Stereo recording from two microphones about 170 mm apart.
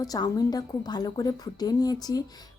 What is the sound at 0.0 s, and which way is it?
A woman's voice, 20° left (ahead or behind).